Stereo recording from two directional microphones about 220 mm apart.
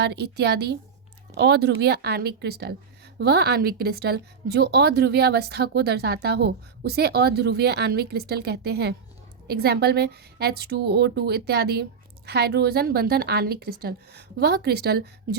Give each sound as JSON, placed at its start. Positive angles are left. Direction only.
{"t": 0.0, "sound": "a woman's voice", "side_deg": -50}